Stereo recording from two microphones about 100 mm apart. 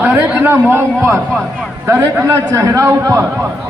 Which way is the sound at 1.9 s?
25° right (ahead or behind).